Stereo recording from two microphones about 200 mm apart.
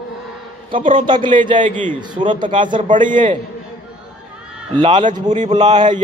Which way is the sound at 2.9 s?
40° right (ahead or behind).